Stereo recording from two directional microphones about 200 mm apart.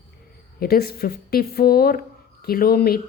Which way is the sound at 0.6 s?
50° left (ahead or behind).